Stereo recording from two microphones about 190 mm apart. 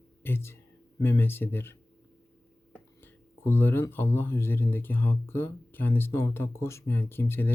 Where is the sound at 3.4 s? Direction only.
10° left (ahead or behind).